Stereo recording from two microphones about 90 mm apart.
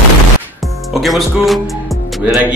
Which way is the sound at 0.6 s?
Centre (ahead or behind).